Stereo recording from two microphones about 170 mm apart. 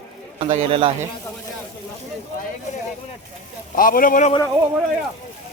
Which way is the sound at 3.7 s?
55° left (ahead or behind).